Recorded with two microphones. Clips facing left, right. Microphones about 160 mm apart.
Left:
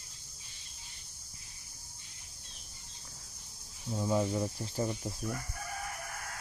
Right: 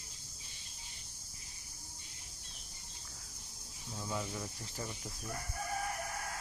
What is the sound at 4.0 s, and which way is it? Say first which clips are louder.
Speech: left 10 dB; 30° left (ahead or behind).